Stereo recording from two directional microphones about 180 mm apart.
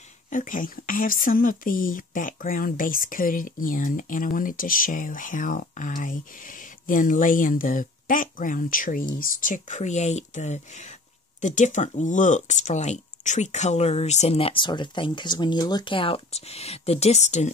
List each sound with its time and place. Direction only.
0.3 s speech: 45° left (ahead or behind)